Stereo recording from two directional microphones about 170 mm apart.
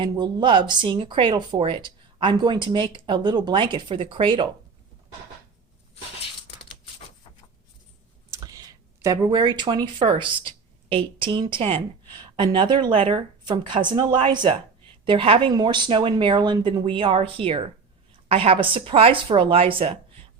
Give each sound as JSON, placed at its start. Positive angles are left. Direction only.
{"t": 0.0, "sound": "speech", "side_deg": -25}
{"t": 8.3, "sound": "a woman's voice", "side_deg": -20}